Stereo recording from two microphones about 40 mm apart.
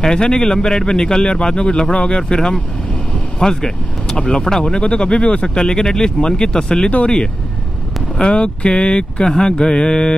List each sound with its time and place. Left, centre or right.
0.0 s speech: left
4.7 s speech: left
5.6 s speech: centre
6.9 s speech: left